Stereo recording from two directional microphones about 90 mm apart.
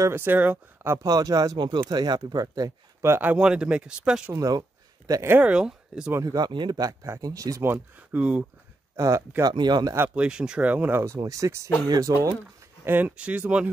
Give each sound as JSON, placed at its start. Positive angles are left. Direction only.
{"t": 0.1, "sound": "speech", "side_deg": -20}
{"t": 1.0, "sound": "speech", "side_deg": -45}
{"t": 1.6, "sound": "speech", "side_deg": -60}
{"t": 3.2, "sound": "speech", "side_deg": -15}
{"t": 4.3, "sound": "a sound", "side_deg": -40}
{"t": 5.4, "sound": "speech", "side_deg": -10}
{"t": 6.2, "sound": "speech", "side_deg": -45}
{"t": 6.5, "sound": "speech", "side_deg": -55}
{"t": 8.1, "sound": "speech", "side_deg": -15}
{"t": 8.9, "sound": "speech", "side_deg": -35}
{"t": 9.4, "sound": "speech", "side_deg": -55}
{"t": 9.9, "sound": "speech", "side_deg": -15}
{"t": 11.0, "sound": "speech", "side_deg": -35}
{"t": 12.8, "sound": "speech", "side_deg": -20}